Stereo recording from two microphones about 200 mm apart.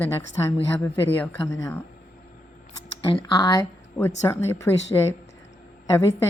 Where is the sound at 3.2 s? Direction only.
20° left (ahead or behind).